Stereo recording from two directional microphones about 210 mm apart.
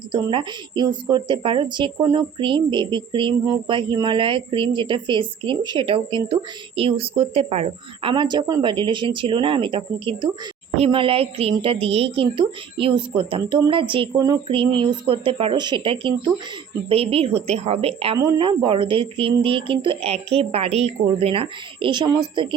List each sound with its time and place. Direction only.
0.1 s a woman's voice: 25° right (ahead or behind)